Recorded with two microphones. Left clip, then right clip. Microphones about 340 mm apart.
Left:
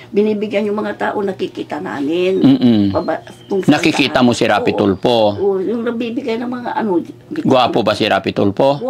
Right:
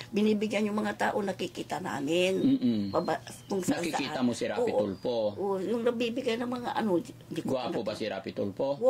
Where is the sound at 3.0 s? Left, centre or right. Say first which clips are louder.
Left 12 dB; right.